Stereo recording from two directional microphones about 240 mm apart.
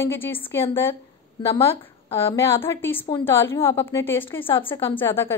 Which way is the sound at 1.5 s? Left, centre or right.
Centre.